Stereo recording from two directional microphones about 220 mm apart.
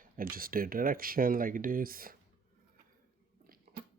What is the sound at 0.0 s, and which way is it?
Speech, 40° right (ahead or behind).